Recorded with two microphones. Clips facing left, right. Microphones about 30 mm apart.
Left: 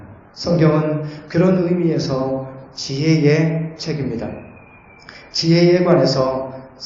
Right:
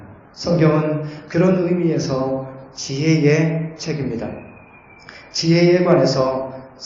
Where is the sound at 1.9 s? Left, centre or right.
Left.